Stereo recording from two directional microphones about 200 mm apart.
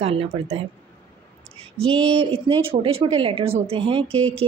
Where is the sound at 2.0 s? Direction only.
25° right (ahead or behind).